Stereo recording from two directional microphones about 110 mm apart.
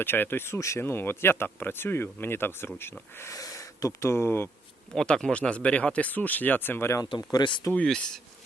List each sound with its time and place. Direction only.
0.0 s speech: 20° left (ahead or behind)
4.9 s speech: 5° left (ahead or behind)
7.2 s speech: 35° left (ahead or behind)
7.7 s speech: 10° left (ahead or behind)